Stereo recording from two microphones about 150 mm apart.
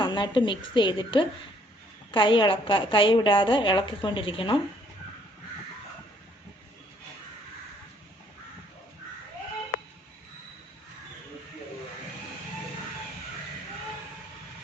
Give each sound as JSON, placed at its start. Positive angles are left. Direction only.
{"t": 0.0, "sound": "a woman's voice", "side_deg": 30}